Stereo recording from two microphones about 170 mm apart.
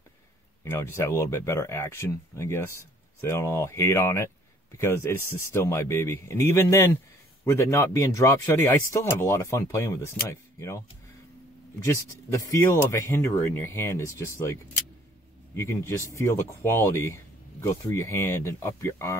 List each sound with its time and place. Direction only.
0.7 s speech: 15° left (ahead or behind)
11.8 s speech: 15° left (ahead or behind)